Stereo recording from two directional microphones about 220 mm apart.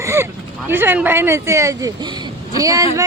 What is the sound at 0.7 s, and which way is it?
Speech, 10° right (ahead or behind).